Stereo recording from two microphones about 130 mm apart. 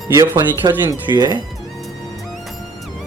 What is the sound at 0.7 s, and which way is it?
Speech, 30° right (ahead or behind).